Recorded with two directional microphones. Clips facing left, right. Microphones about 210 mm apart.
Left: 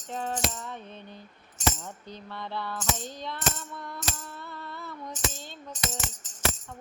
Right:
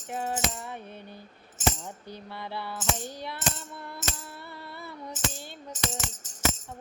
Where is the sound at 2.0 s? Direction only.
10° right (ahead or behind).